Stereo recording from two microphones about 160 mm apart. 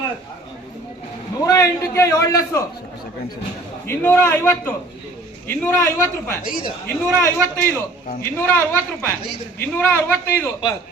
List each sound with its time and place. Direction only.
1.5 s a man's voice: 20° left (ahead or behind)
3.8 s a man's voice: 15° left (ahead or behind)
6.4 s a man's voice: 60° left (ahead or behind)
6.8 s a man's voice: 10° left (ahead or behind)